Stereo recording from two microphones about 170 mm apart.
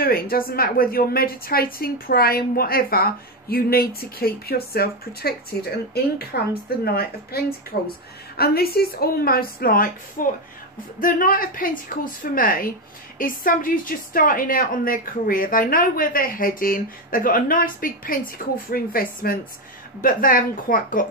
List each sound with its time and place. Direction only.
0.0 s a woman's voice: 60° left (ahead or behind)